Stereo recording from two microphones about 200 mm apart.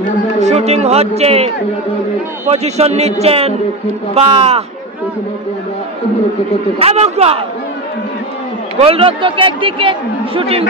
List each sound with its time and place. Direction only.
0.4 s a man's voice: 35° right (ahead or behind)
6.8 s a man's voice: 30° right (ahead or behind)
8.7 s a man's voice: 30° right (ahead or behind)